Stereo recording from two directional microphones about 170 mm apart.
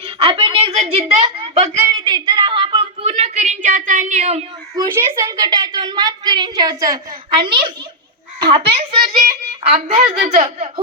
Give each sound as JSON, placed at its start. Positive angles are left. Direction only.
{"t": 0.0, "sound": "a woman's voice", "side_deg": -35}
{"t": 2.0, "sound": "a sound", "side_deg": -25}
{"t": 4.8, "sound": "a woman's voice", "side_deg": -20}
{"t": 7.4, "sound": "a woman's voice", "side_deg": -30}